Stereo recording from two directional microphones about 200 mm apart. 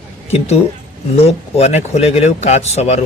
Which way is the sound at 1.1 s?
30° left (ahead or behind).